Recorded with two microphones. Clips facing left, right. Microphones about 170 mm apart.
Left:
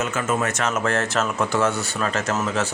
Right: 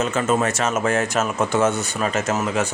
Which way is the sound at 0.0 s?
30° right (ahead or behind).